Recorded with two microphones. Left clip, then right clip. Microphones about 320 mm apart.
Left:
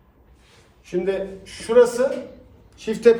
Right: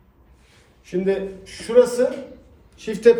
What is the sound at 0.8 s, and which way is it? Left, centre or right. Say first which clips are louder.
A man's voice: right 1 dB; centre.